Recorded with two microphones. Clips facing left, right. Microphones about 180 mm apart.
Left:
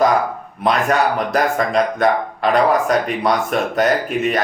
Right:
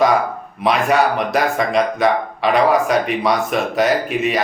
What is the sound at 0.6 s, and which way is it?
Speech, 5° right (ahead or behind).